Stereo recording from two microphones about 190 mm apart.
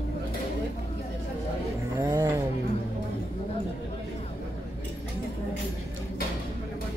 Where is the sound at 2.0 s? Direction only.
20° right (ahead or behind).